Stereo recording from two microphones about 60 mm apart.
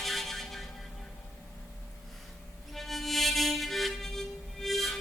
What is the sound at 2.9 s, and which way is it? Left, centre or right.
Harmonica, centre.